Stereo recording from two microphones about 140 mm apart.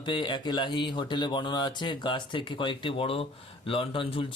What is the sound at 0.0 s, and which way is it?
Speech, 35° left (ahead or behind).